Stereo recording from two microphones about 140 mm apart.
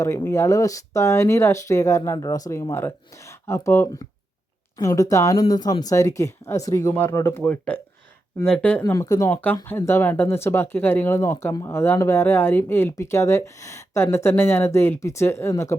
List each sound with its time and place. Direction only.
0.3 s speech: 20° left (ahead or behind)
8.8 s speech: 20° left (ahead or behind)